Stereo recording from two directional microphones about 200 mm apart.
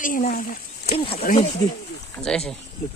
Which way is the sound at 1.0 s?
25° left (ahead or behind).